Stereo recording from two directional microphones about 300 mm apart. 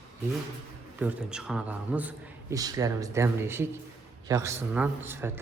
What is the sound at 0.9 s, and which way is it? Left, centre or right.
Speech, centre.